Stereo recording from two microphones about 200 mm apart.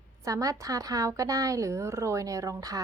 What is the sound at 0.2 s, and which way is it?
A woman's voice, 15° right (ahead or behind).